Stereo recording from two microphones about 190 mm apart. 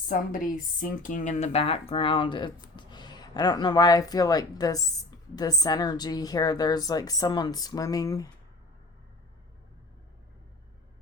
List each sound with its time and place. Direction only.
0.1 s a woman's voice: 45° left (ahead or behind); by 8.3 s 20° left (ahead or behind)